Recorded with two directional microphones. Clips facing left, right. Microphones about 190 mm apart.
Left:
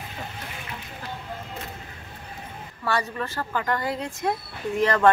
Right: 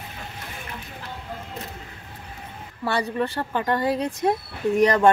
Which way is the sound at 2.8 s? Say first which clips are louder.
Right 3 dB; 25° right (ahead or behind).